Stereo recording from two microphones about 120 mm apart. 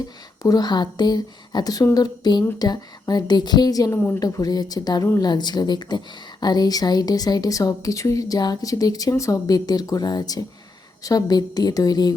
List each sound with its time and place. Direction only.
0.4 s speech: 35° left (ahead or behind)
3.9 s a woman's voice: 15° left (ahead or behind)
4.2 s speech: 30° left (ahead or behind)